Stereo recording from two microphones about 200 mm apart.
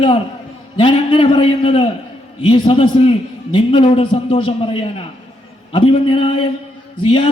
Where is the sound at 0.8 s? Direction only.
25° left (ahead or behind).